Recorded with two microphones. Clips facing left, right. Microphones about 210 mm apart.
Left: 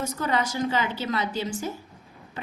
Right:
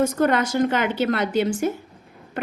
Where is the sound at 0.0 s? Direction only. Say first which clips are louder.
Right 7 dB; 55° right (ahead or behind).